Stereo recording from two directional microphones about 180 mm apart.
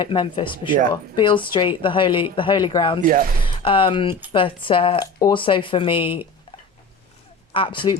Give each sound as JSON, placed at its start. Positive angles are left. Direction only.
{"t": 0.0, "sound": "speech", "side_deg": 30}
{"t": 3.0, "sound": "speech", "side_deg": -50}
{"t": 3.4, "sound": "speech", "side_deg": 30}
{"t": 7.5, "sound": "speech", "side_deg": 30}